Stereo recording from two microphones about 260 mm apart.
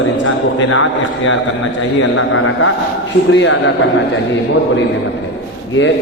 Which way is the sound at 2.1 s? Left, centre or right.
Left.